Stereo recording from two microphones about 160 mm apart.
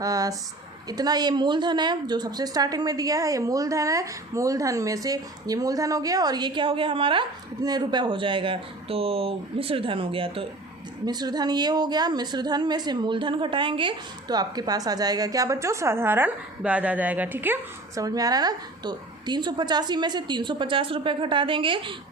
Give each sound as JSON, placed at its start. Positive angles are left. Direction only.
{"t": 0.0, "sound": "a woman's voice", "side_deg": -20}